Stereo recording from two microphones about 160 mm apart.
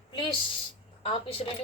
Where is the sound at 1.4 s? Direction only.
45° left (ahead or behind).